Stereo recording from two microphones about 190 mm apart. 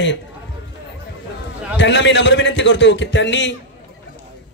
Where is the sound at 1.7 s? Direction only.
70° left (ahead or behind).